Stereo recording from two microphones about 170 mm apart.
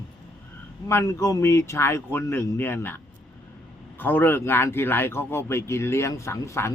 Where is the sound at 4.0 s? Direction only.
10° left (ahead or behind).